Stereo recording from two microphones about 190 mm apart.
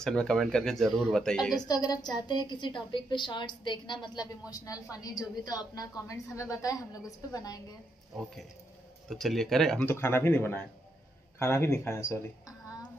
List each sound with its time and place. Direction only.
0.0 s speech: 5° left (ahead or behind)
1.7 s a woman's voice: 20° left (ahead or behind)
9.1 s a woman's voice: centre (ahead or behind)